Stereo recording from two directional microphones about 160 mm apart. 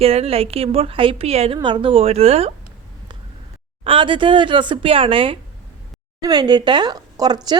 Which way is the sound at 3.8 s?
30° right (ahead or behind).